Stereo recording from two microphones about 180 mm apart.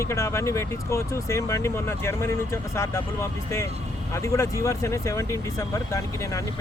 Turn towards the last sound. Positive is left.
turn(degrees=20)  # may be behind; listen again after turning